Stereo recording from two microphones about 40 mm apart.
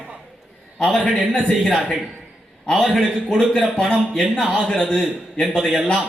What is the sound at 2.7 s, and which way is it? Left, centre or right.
Speech, centre.